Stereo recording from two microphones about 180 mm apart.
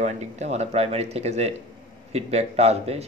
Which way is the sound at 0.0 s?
40° right (ahead or behind).